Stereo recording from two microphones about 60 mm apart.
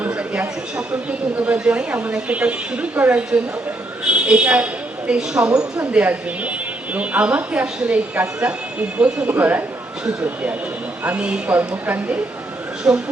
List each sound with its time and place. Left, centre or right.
0.1 s a man's voice: centre
4.0 s a sound: centre
5.1 s a woman's voice: centre; by 9.6 s right
11.0 s a woman's voice: right